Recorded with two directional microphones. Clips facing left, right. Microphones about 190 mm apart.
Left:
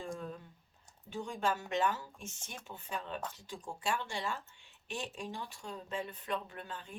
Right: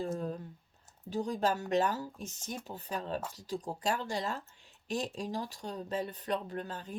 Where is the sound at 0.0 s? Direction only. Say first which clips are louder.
Right 6 dB; 35° right (ahead or behind).